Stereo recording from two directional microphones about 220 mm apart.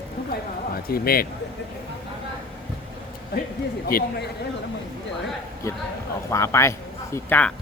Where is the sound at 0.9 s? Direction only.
45° left (ahead or behind).